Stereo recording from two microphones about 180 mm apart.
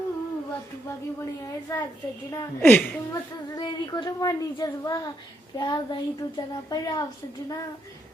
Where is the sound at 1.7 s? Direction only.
20° left (ahead or behind).